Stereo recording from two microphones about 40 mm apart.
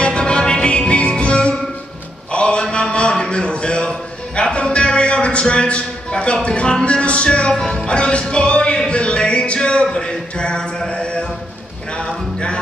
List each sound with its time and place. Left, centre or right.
0.0 s music: left
2.3 s mantra: left
2.7 s a sound: left
4.6 s music: left
7.5 s music: centre
10.9 s mantra: left
12.0 s music: left